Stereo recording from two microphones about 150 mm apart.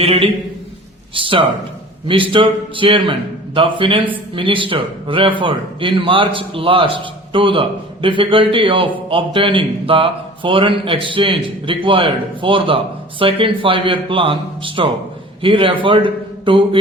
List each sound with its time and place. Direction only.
0.0 s a man's voice: 40° right (ahead or behind)